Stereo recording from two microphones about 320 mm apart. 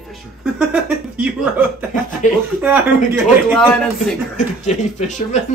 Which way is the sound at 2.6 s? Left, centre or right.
Centre.